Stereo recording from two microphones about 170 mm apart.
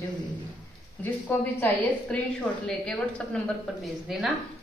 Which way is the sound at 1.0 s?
10° left (ahead or behind).